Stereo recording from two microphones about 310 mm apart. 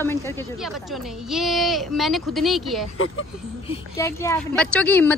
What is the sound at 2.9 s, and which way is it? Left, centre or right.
Speech, left.